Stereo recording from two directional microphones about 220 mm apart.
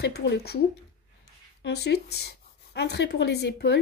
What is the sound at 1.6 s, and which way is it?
Speech, 50° left (ahead or behind).